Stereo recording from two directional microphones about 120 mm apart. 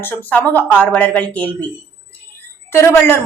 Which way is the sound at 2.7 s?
20° left (ahead or behind).